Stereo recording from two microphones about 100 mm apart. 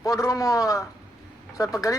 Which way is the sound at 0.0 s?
35° left (ahead or behind).